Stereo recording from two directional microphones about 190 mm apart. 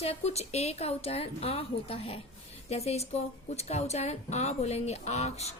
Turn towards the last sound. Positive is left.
turn(degrees=35)  # may be behind; listen again after turning